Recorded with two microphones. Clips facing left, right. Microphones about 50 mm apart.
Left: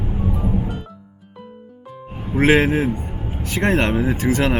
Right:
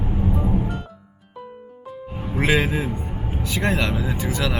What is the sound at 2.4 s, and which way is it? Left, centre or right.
A man's voice, left.